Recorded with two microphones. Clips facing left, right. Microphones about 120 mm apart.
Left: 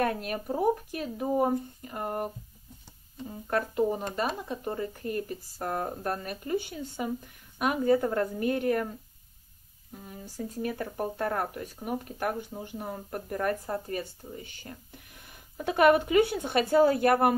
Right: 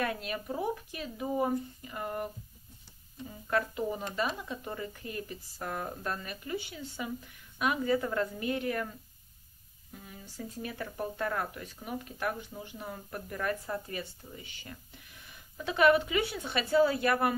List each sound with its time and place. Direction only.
0.0 s speech: 45° left (ahead or behind)
9.9 s speech: 40° left (ahead or behind)